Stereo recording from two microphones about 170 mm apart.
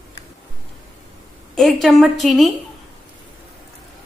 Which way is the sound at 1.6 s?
Centre (ahead or behind).